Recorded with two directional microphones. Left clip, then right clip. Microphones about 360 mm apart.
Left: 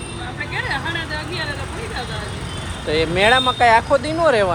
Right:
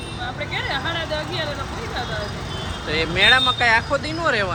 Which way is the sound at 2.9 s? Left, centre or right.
Centre.